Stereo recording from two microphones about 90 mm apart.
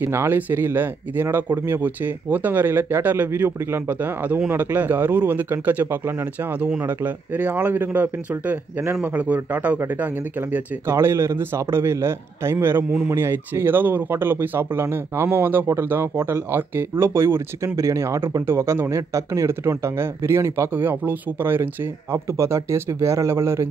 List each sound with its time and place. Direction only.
0.0 s a man's voice: 30° right (ahead or behind)
10.5 s speech: 30° right (ahead or behind)